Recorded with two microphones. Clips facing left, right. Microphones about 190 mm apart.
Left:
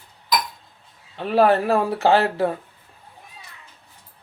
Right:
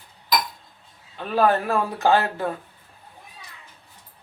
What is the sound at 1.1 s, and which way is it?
A man's voice, 30° left (ahead or behind).